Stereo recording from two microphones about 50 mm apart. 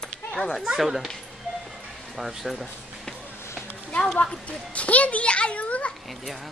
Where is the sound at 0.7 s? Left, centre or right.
Centre.